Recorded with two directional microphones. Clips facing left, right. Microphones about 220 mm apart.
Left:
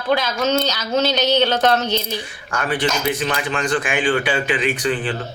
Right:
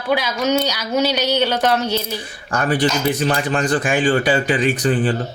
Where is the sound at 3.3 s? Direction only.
40° right (ahead or behind).